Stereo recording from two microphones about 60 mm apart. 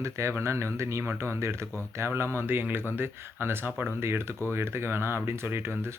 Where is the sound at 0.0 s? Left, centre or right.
Right.